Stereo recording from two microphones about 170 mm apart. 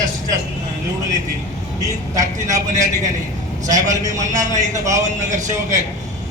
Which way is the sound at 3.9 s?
20° right (ahead or behind).